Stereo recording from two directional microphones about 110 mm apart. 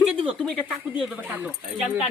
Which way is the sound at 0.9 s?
10° right (ahead or behind).